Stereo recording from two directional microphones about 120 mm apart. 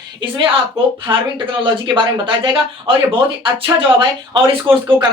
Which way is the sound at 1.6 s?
45° right (ahead or behind).